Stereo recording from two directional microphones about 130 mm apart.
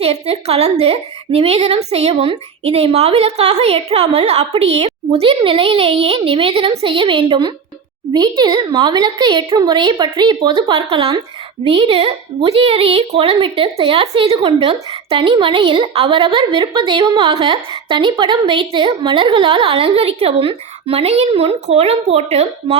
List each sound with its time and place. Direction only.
0.0 s a woman's voice: 50° right (ahead or behind)